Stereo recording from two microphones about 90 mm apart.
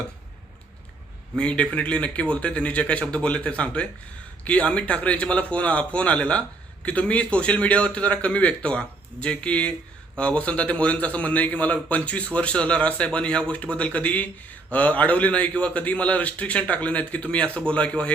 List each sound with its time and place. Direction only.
1.4 s a man's voice: 15° left (ahead or behind)